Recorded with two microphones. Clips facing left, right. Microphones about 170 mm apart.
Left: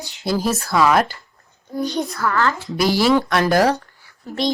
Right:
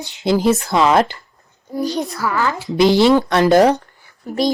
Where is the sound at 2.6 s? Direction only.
20° right (ahead or behind).